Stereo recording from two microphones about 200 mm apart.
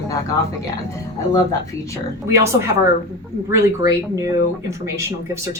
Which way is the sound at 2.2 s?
15° right (ahead or behind).